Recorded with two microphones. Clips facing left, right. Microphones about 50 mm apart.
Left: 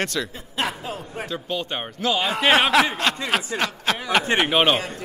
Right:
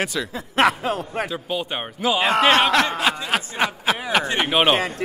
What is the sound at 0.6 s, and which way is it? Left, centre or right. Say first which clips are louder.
Speech: right 8 dB; right.